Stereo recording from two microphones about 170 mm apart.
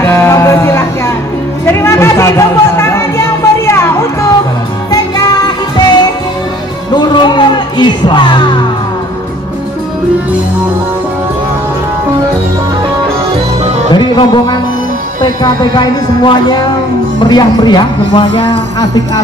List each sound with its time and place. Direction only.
0.0 s music: 15° left (ahead or behind)
6.9 s music: 25° left (ahead or behind)
13.9 s speech: 25° left (ahead or behind)